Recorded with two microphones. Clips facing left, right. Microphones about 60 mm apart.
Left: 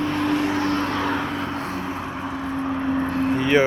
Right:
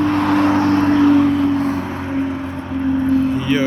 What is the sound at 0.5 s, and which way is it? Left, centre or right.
Vehicle, right.